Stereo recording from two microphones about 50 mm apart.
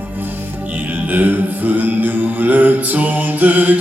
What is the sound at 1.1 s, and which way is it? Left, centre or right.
Mantra, right.